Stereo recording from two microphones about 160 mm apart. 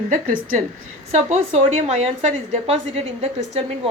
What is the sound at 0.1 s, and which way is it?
A woman's voice, 55° right (ahead or behind).